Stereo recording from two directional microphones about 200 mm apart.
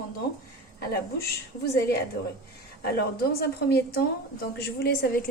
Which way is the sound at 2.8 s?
50° left (ahead or behind).